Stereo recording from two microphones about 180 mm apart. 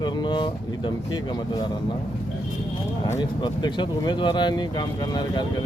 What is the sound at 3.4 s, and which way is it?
Speech, 25° left (ahead or behind).